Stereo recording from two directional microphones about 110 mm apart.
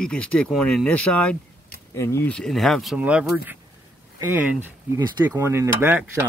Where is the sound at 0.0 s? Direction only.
10° left (ahead or behind).